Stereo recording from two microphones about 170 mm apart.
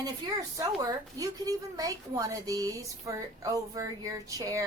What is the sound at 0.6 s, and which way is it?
A woman's voice, 20° right (ahead or behind).